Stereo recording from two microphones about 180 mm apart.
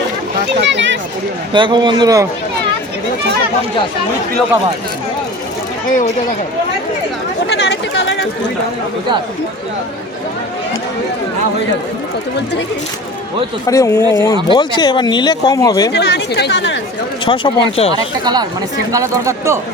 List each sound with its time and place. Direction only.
0.6 s a sound: 80° right
1.5 s a man's voice: 25° right (ahead or behind)
7.5 s speech: 70° left (ahead or behind)
13.7 s speech: 15° left (ahead or behind)
14.5 s speech: 25° left (ahead or behind)
15.9 s a woman's voice: 65° left (ahead or behind)
17.2 s speech: 30° left (ahead or behind)
17.9 s a man's voice: 25° right (ahead or behind)